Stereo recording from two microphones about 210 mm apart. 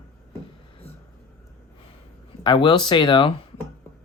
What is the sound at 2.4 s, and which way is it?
Speech, 20° left (ahead or behind).